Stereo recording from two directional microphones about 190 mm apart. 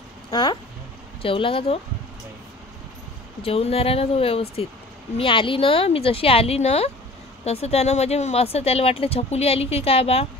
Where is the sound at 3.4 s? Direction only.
30° left (ahead or behind).